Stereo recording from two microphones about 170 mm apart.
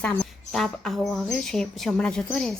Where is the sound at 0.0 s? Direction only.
5° left (ahead or behind).